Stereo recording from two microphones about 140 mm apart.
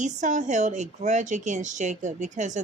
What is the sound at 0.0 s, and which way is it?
Speech, 60° right (ahead or behind).